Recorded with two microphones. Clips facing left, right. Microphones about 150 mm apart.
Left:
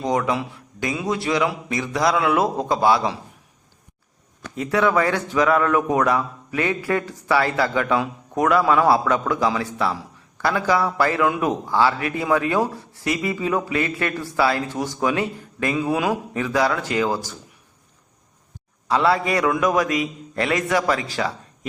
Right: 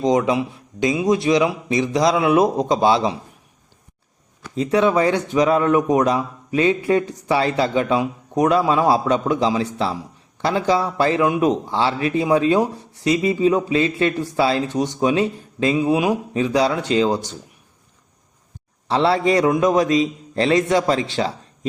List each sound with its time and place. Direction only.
0.0 s speech: 20° right (ahead or behind)
4.5 s speech: 20° right (ahead or behind)
18.9 s speech: 30° right (ahead or behind)